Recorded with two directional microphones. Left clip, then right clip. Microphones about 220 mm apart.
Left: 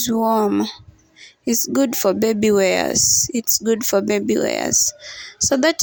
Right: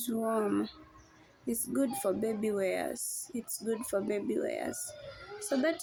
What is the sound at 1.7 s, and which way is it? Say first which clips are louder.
Speech: left 13 dB; 40° left (ahead or behind).